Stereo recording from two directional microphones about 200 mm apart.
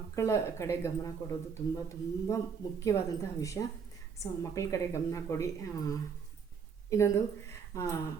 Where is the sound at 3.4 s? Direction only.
15° left (ahead or behind).